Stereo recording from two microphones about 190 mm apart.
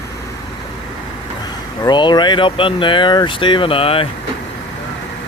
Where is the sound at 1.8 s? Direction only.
25° left (ahead or behind).